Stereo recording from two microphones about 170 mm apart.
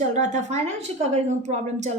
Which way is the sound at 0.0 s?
45° right (ahead or behind).